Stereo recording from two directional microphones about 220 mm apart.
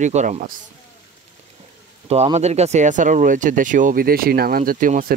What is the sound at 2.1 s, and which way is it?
Speech, 30° right (ahead or behind).